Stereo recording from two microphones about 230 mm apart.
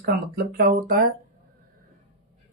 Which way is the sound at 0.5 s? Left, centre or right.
Right.